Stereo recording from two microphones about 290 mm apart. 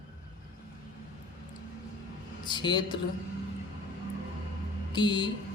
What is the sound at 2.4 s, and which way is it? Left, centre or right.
Speech, centre.